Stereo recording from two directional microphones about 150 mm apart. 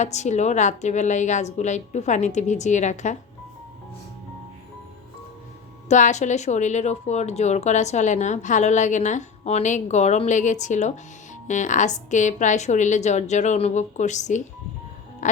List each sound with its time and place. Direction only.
0.0 s a woman's voice: 50° left (ahead or behind)
5.9 s a woman's voice: 50° left (ahead or behind)
15.2 s music: 55° left (ahead or behind)